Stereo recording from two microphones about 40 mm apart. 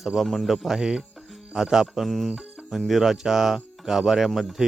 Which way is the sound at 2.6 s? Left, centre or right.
Centre.